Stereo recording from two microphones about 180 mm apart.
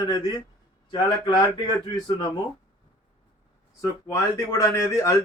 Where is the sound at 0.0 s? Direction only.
25° left (ahead or behind).